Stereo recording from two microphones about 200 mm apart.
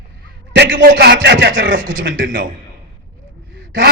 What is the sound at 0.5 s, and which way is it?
A man's voice, 60° right (ahead or behind).